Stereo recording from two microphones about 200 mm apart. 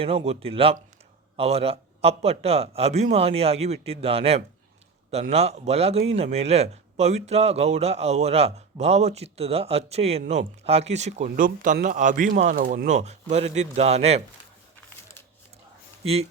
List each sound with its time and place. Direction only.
0.0 s a man's voice: 30° right (ahead or behind)